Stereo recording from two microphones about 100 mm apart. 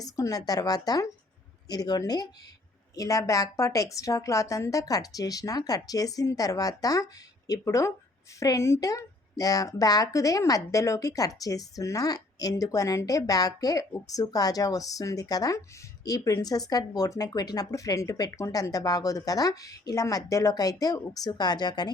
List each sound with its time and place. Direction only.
0.0 s a woman's voice: 35° left (ahead or behind)